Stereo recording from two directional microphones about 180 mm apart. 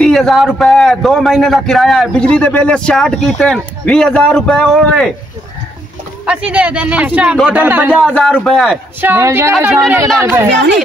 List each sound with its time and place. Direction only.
0.0 s a man's voice: centre (ahead or behind)
6.2 s speech: 5° right (ahead or behind)
8.0 s a man's voice: 5° left (ahead or behind)
9.0 s speech: 15° right (ahead or behind)